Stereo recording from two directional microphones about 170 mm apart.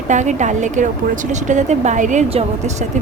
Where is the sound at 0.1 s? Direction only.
45° right (ahead or behind).